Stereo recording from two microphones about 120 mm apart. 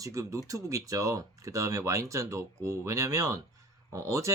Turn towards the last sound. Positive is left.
turn(degrees=-25)  # may be behind; listen again after turning